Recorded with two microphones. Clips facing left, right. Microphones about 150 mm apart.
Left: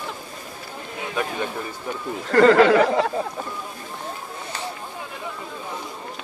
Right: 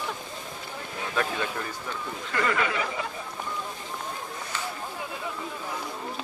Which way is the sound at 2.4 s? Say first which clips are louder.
Left 14 dB; 75° left (ahead or behind).